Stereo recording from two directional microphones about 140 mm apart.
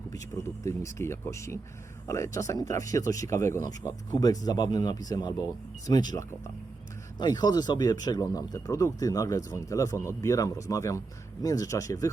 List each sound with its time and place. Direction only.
0.1 s speech: 20° left (ahead or behind)